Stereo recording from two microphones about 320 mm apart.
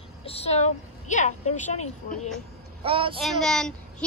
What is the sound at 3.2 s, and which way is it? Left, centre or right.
Speech, centre.